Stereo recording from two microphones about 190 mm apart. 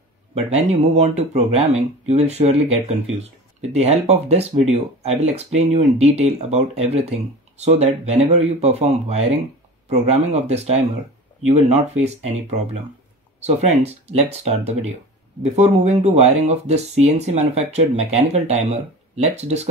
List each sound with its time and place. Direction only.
0.3 s speech: 35° right (ahead or behind)
13.4 s speech: 35° right (ahead or behind)